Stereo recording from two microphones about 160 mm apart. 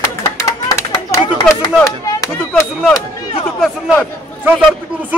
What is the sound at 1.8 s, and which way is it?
Speech, 20° left (ahead or behind).